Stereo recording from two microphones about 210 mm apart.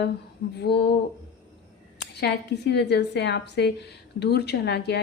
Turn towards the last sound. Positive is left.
turn(degrees=50)  # may be behind; listen again after turning